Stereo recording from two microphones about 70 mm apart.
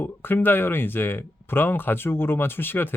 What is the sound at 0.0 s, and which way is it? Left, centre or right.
Speech, left.